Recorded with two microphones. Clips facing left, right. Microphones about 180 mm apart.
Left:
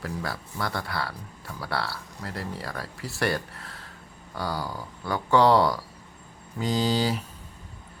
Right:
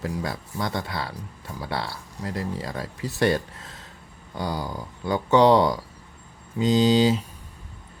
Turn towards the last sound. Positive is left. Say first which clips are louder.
# right 6 dB
turn(degrees=-20)  # may be behind; listen again after turning